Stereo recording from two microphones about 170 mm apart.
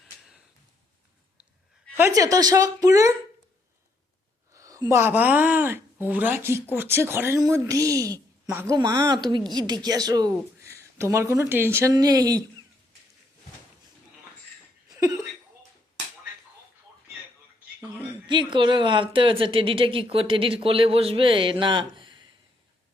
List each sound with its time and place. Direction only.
2.0 s speech: 15° right (ahead or behind)
4.5 s speech: 20° right (ahead or behind)
14.8 s a sound: 20° right (ahead or behind)
18.3 s a woman's voice: 30° right (ahead or behind)